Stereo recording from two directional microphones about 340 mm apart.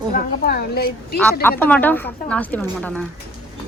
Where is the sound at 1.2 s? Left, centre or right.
Centre.